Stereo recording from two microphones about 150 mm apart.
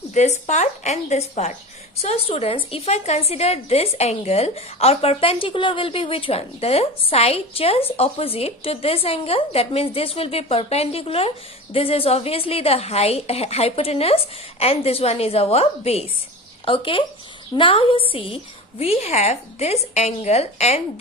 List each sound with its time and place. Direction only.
0.1 s a woman's voice: 50° left (ahead or behind)